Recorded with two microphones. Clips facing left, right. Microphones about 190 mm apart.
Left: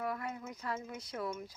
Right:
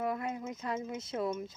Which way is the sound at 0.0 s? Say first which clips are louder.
Right 4 dB; 20° right (ahead or behind).